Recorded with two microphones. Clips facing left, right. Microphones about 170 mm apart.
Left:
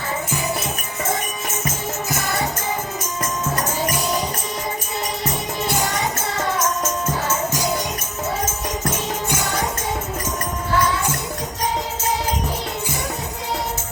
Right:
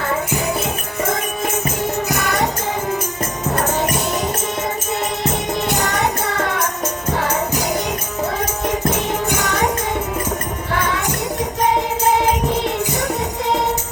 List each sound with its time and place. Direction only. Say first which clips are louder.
2.0 s music: right 2 dB; 70° right (ahead or behind)
5.7 s music: right 2 dB; 70° right (ahead or behind)
9.4 s music: right 4 dB; 80° right
10.7 s music: left 1 dB; 90° right